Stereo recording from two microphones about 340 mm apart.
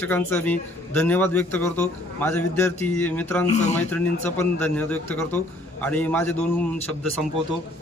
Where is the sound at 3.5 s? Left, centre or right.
Centre.